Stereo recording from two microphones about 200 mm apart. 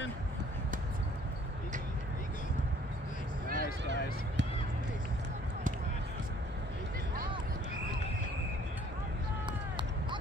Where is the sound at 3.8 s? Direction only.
60° right (ahead or behind).